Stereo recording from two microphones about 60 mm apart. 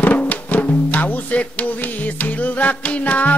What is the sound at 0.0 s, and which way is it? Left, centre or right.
Music, left.